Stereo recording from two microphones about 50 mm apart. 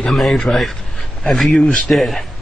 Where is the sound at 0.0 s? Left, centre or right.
Centre.